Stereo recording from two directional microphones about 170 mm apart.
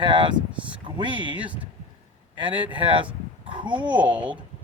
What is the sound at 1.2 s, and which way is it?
Speech, 30° left (ahead or behind).